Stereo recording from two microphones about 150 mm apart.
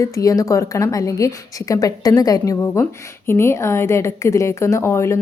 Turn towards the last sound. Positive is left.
turn(degrees=20)  # may be behind; listen again after turning